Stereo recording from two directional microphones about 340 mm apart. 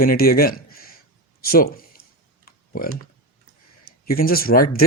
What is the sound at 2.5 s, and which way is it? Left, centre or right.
Computer keyboard, left.